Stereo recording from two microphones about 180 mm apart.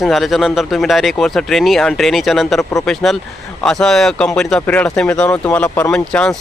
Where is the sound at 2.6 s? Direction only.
15° left (ahead or behind).